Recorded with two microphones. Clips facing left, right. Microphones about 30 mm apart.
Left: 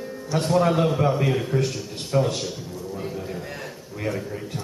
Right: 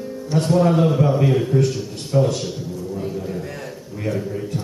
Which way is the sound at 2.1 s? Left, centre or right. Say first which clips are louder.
Right 4 dB; centre.